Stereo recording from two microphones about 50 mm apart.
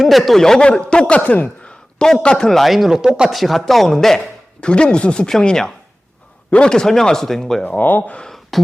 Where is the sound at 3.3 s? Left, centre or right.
Centre.